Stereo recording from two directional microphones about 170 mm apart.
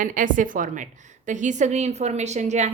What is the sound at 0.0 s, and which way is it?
A woman's voice, 50° right (ahead or behind).